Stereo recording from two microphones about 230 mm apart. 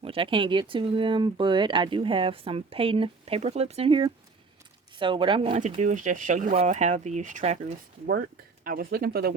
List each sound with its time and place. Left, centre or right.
0.0 s speech: right